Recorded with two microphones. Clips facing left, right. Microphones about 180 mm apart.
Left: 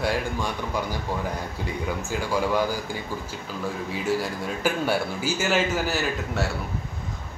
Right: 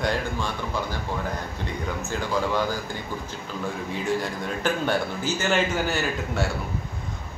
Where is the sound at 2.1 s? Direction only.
10° left (ahead or behind).